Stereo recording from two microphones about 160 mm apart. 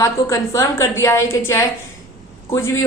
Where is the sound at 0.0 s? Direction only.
20° left (ahead or behind).